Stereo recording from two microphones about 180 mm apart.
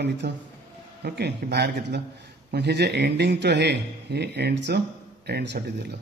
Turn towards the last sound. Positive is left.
turn(degrees=-65)  # may be behind; listen again after turning